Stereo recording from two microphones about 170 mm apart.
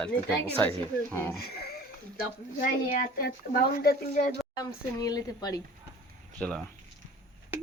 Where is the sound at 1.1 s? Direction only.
15° left (ahead or behind).